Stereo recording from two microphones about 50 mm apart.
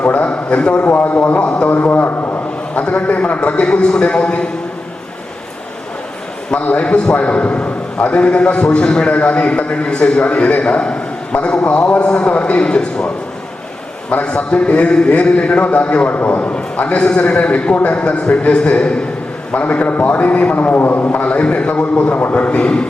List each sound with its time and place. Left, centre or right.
0.0 s a sound: left
0.8 s a man's voice: left
6.8 s a man's voice: left
14.1 s a man's voice: left
19.5 s a man's voice: left